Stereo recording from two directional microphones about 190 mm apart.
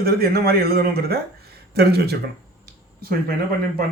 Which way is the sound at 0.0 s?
55° right (ahead or behind).